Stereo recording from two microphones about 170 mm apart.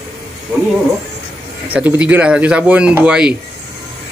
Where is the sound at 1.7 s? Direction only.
10° right (ahead or behind).